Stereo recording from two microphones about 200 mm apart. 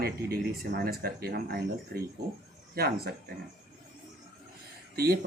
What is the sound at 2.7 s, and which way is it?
Speech, 50° right (ahead or behind).